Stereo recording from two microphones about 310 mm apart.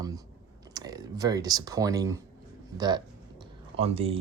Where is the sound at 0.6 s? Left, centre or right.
Centre.